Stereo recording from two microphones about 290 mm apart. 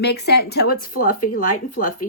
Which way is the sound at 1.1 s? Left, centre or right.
Left.